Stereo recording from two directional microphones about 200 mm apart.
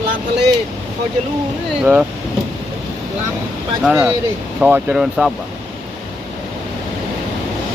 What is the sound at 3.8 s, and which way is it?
Speech, 5° right (ahead or behind).